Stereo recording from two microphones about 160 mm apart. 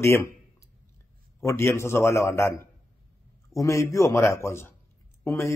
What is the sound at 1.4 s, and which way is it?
A man's voice, 15° left (ahead or behind).